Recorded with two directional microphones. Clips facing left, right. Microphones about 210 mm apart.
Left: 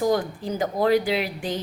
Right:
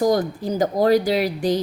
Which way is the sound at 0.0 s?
40° right (ahead or behind).